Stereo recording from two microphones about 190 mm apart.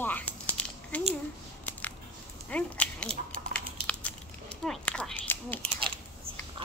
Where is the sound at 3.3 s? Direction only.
5° left (ahead or behind).